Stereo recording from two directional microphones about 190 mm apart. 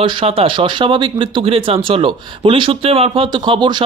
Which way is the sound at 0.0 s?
30° right (ahead or behind).